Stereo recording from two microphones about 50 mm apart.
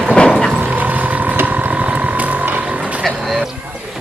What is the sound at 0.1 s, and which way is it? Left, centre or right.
Vehicle, centre.